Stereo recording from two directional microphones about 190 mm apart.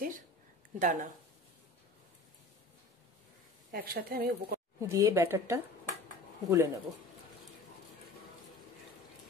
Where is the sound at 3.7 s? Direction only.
50° right (ahead or behind).